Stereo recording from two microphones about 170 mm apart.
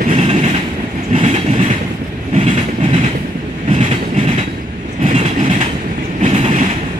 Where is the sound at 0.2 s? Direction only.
40° right (ahead or behind).